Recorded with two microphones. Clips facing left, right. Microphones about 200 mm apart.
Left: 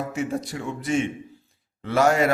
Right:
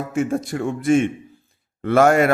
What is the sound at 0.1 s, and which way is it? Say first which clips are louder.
A man's voice: right 6 dB; 50° right (ahead or behind).